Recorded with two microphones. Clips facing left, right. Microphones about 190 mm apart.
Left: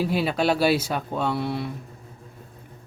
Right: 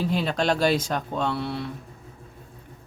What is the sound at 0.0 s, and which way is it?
Speech, 5° left (ahead or behind).